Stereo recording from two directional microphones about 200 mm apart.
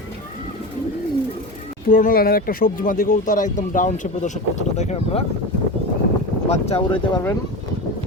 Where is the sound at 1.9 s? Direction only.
45° left (ahead or behind).